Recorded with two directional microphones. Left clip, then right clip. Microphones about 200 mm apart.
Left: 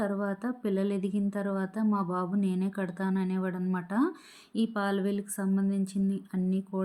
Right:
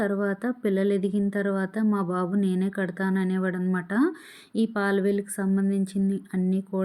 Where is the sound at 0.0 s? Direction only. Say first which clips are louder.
Right 5 dB; 20° right (ahead or behind).